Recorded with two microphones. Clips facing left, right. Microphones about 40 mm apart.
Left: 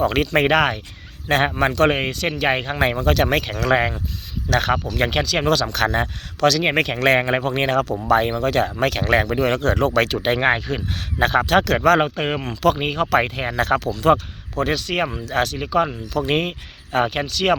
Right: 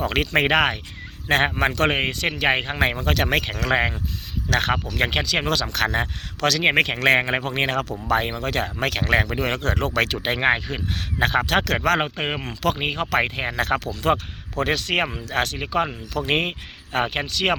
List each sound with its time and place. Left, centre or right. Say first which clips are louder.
0.1 s speech: left 2 dB; centre
4.5 s speech: left 2 dB; right
4.9 s speech: left 2 dB; centre
6.4 s speech: left 1 dB; right
7.1 s speech: left 2 dB; centre
9.0 s speech: left 3 dB; centre
11.9 s speech: left 5 dB; centre
14.6 s speech: left 1 dB; right
15.0 s speech: left 3 dB; right
15.9 s speech: left 4 dB; centre
16.3 s speech: left 1 dB; right